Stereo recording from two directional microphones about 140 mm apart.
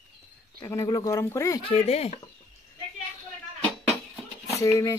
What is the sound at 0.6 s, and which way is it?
Speech, 25° left (ahead or behind).